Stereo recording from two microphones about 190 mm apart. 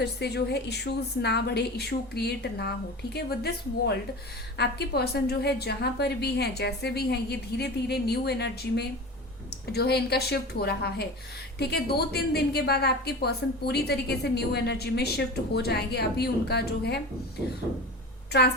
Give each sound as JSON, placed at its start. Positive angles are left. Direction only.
{"t": 0.0, "sound": "a woman's voice", "side_deg": 60}
{"t": 18.3, "sound": "a woman's voice", "side_deg": 60}